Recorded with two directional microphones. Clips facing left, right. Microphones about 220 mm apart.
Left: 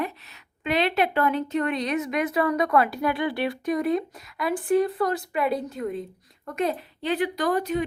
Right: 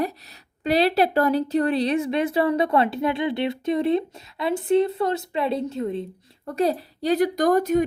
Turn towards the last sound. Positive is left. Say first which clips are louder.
# right 5 dB
turn(degrees=-45)  # may be behind; listen again after turning